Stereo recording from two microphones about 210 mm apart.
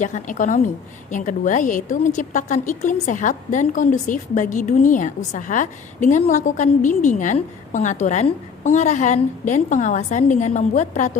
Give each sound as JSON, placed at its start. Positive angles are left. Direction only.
{"t": 0.0, "sound": "a woman's voice", "side_deg": 35}